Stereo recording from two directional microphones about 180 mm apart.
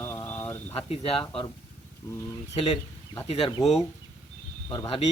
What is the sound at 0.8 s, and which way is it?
Speech, 35° left (ahead or behind).